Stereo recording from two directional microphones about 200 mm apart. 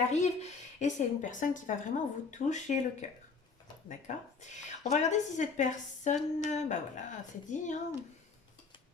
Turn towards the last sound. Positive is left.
turn(degrees=40)  # may be behind; listen again after turning